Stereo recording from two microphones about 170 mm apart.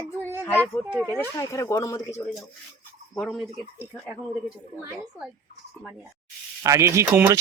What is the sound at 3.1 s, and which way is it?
Speech, centre (ahead or behind).